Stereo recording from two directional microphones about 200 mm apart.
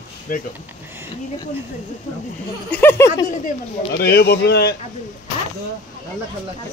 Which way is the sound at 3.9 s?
50° left (ahead or behind).